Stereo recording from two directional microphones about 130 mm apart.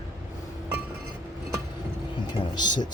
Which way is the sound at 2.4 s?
35° left (ahead or behind).